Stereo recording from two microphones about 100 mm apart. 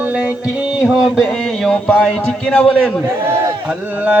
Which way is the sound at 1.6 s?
10° left (ahead or behind).